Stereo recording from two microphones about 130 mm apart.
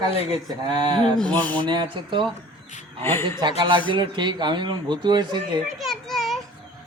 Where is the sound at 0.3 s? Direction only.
35° right (ahead or behind).